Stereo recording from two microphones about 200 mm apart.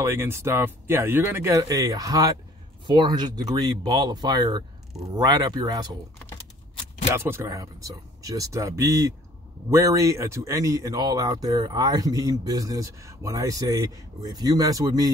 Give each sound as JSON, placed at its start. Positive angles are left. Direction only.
{"t": 0.0, "sound": "speech", "side_deg": -15}
{"t": 7.2, "sound": "speech", "side_deg": -15}